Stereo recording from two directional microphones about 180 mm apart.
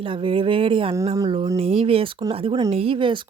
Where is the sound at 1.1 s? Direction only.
20° right (ahead or behind).